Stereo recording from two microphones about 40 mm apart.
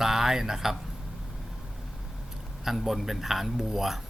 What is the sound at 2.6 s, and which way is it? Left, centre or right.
Speech, centre.